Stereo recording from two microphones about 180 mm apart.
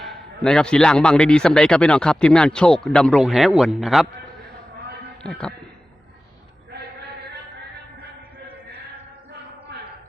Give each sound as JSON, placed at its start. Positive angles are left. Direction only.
{"t": 0.0, "sound": "a man's voice", "side_deg": 0}
{"t": 5.2, "sound": "a man's voice", "side_deg": 5}
{"t": 9.7, "sound": "music", "side_deg": -70}